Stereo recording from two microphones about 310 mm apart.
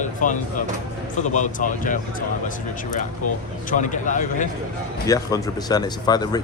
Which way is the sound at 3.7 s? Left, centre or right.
Left.